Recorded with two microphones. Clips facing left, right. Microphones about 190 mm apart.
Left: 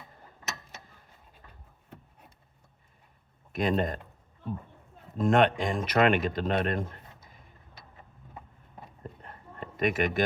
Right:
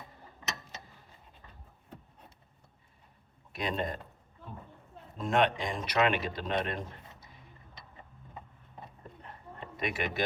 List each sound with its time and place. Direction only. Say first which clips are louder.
3.5 s speech: left 6 dB; 50° left (ahead or behind)
5.1 s speech: left 5 dB; 50° left (ahead or behind)
9.7 s speech: left 7 dB; 50° left (ahead or behind)